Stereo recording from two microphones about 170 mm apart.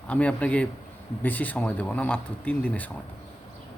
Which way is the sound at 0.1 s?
10° left (ahead or behind).